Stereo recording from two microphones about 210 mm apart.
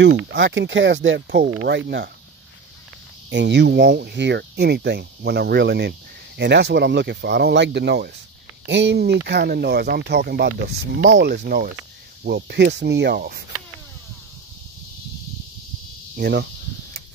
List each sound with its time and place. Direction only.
0.0 s speech: 55° right (ahead or behind)
3.3 s speech: 60° right (ahead or behind)
16.2 s speech: 50° right (ahead or behind)